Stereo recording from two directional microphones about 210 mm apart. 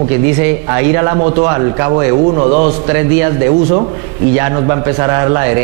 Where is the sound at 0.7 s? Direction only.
15° right (ahead or behind).